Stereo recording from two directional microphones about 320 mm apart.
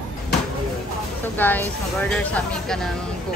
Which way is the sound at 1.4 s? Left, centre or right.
Centre.